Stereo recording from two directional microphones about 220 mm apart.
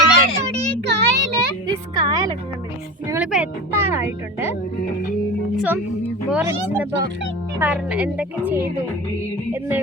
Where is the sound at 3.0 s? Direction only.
5° right (ahead or behind).